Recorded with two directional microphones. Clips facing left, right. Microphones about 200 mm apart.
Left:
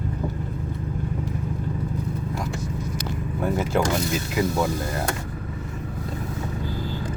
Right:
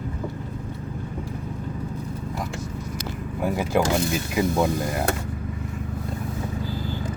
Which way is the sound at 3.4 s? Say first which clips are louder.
Right 1 dB; 15° right (ahead or behind).